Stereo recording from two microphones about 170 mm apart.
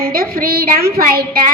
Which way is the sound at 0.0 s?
60° right (ahead or behind).